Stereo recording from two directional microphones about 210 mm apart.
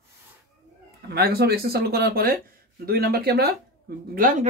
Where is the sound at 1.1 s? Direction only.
50° right (ahead or behind).